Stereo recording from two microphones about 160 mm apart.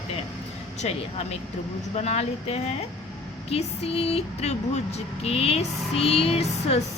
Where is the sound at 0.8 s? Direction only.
40° left (ahead or behind).